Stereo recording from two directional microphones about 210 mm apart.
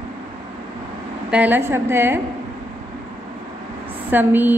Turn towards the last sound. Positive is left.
turn(degrees=-10)  # may be behind; listen again after turning